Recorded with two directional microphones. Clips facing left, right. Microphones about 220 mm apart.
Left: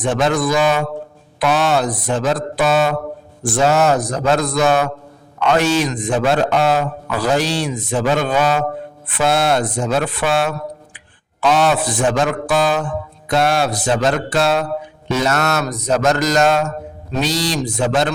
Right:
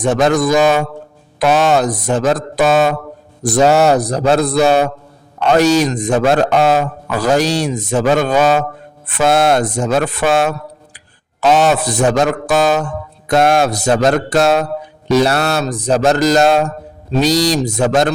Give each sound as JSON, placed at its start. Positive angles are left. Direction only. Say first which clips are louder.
{"t": 0.0, "sound": "a man's voice", "louder": "right 4 dB", "side_deg": -45}
{"t": 3.4, "sound": "mantra", "louder": "right 4 dB", "side_deg": -40}
{"t": 5.4, "sound": "a man's voice", "louder": "right 4 dB", "side_deg": -40}
{"t": 15.1, "sound": "mantra", "louder": "right 5 dB", "side_deg": -35}